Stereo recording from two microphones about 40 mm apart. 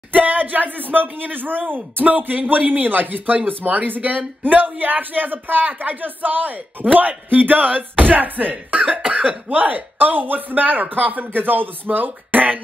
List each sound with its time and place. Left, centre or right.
0.1 s speech: right
9.0 s speech: right